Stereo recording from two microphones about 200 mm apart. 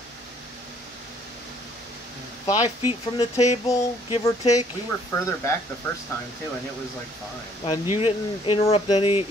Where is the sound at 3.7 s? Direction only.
25° left (ahead or behind).